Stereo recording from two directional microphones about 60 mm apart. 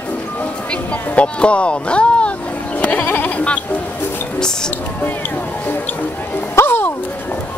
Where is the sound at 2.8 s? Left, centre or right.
Left.